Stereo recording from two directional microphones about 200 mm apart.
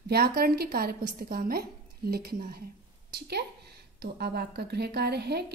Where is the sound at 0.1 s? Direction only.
50° right (ahead or behind).